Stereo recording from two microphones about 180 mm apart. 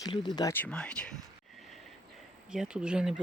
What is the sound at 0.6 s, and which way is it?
Speech, 5° left (ahead or behind).